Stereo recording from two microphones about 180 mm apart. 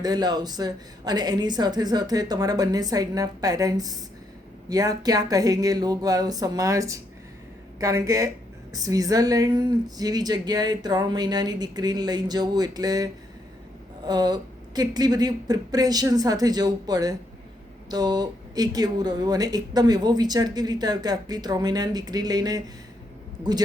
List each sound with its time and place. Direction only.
0.0 s speech: 20° right (ahead or behind)
14.1 s speech: 20° right (ahead or behind)